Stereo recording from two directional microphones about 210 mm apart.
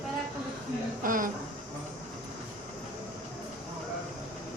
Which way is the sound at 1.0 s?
40° right (ahead or behind).